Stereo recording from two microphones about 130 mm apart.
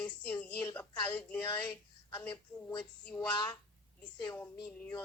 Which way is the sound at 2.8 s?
10° left (ahead or behind).